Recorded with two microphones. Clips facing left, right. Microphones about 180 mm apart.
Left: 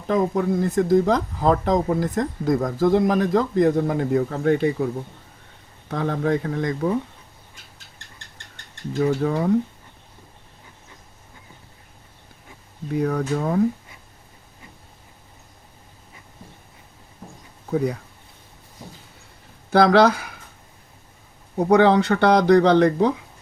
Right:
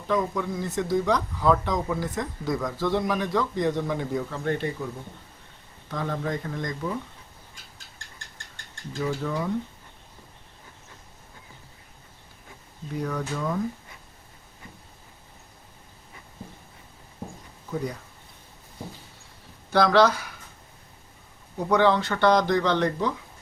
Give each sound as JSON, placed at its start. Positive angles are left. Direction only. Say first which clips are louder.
{"t": 0.1, "sound": "speech", "louder": "left 6 dB", "side_deg": 50}
{"t": 5.9, "sound": "speech", "louder": "left 7 dB", "side_deg": 65}
{"t": 9.0, "sound": "speech", "louder": "left 7 dB", "side_deg": 55}
{"t": 12.9, "sound": "speech", "louder": "left 7 dB", "side_deg": 60}
{"t": 17.7, "sound": "speech", "louder": "left 8 dB", "side_deg": 65}
{"t": 19.7, "sound": "speech", "louder": "left 4 dB", "side_deg": 55}
{"t": 21.6, "sound": "speech", "louder": "left 6 dB", "side_deg": 60}